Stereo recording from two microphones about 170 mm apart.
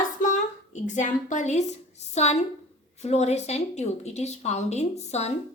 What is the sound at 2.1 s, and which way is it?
A woman's voice, 40° left (ahead or behind).